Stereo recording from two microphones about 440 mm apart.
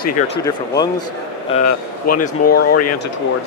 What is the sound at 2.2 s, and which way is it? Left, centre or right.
Speech, centre.